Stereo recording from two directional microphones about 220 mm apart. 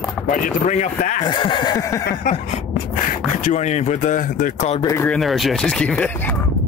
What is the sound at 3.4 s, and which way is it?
Speech, 35° left (ahead or behind).